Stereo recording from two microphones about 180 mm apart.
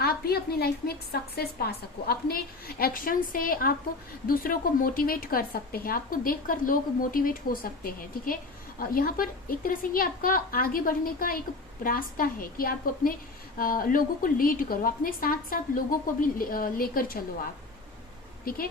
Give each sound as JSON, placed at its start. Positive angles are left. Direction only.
{"t": 0.0, "sound": "a woman's voice", "side_deg": 60}
{"t": 18.4, "sound": "a woman's voice", "side_deg": 55}